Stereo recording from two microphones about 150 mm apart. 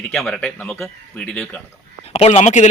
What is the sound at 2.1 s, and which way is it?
Speech, 45° left (ahead or behind).